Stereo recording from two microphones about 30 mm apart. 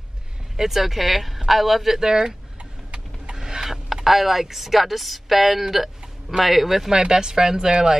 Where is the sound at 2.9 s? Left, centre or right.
Right.